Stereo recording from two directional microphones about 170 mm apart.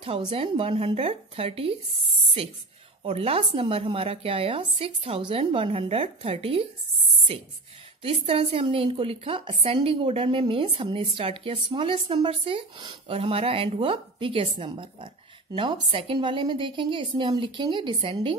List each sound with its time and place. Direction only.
0.0 s a woman's voice: 35° right (ahead or behind)
8.0 s a woman's voice: 35° right (ahead or behind)